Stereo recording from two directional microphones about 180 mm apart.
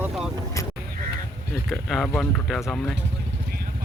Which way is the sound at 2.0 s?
5° left (ahead or behind).